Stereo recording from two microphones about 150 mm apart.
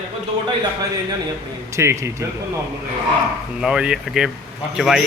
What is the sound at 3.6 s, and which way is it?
A man's voice, 5° right (ahead or behind).